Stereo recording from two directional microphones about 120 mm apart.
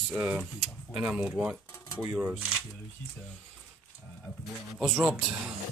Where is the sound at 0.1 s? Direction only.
10° right (ahead or behind).